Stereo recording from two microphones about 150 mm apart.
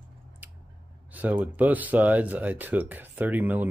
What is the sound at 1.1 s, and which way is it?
Speech, 10° right (ahead or behind).